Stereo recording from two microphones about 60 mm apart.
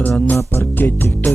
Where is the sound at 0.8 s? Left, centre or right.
Left.